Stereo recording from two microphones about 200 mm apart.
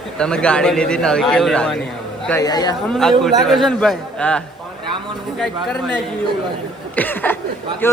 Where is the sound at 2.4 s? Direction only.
20° left (ahead or behind).